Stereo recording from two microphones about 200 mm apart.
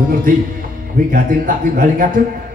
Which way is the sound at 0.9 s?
40° right (ahead or behind).